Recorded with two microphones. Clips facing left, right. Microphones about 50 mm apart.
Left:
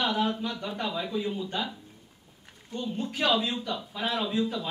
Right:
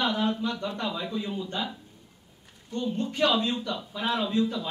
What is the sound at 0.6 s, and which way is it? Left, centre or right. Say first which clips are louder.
Speech: right 1 dB; centre.